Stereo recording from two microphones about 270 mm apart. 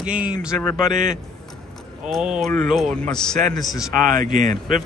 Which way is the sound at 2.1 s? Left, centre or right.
Centre.